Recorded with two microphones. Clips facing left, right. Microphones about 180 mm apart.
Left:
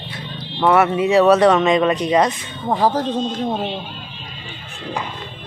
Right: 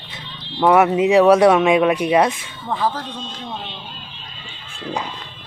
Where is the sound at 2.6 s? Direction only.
40° left (ahead or behind).